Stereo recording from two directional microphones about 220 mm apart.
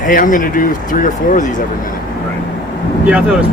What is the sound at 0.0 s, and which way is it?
Speech, 40° left (ahead or behind).